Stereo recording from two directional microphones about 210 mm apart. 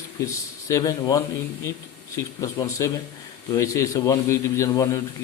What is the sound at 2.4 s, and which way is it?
A man's voice, 15° left (ahead or behind).